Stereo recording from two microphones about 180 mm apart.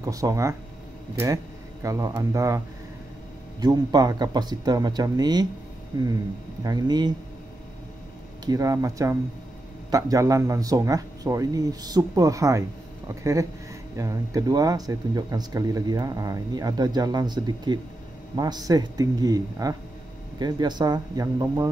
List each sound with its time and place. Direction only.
0.0 s a man's voice: 20° right (ahead or behind)
3.6 s speech: 20° right (ahead or behind)
6.6 s speech: 20° right (ahead or behind)
8.5 s a man's voice: 20° right (ahead or behind)